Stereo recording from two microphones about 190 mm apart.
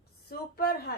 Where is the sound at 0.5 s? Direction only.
55° left (ahead or behind).